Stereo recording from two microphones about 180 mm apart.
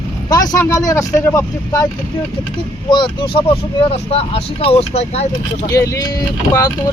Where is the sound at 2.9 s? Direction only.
25° left (ahead or behind).